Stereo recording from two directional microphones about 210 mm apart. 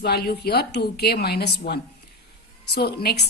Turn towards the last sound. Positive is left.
turn(degrees=50)  # may be behind; listen again after turning